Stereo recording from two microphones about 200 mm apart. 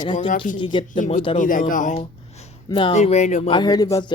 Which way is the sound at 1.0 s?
40° left (ahead or behind).